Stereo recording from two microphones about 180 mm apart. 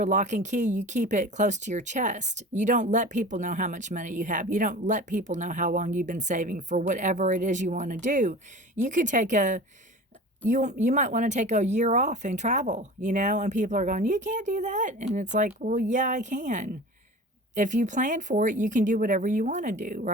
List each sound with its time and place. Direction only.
0.0 s speech: 45° right (ahead or behind)